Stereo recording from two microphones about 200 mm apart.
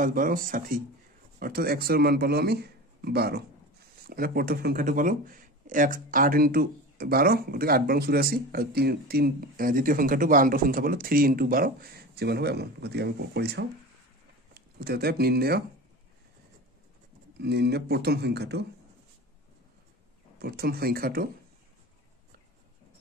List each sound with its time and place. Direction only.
0.0 s speech: 45° right (ahead or behind)
17.4 s speech: 55° right (ahead or behind)
20.3 s speech: 50° right (ahead or behind)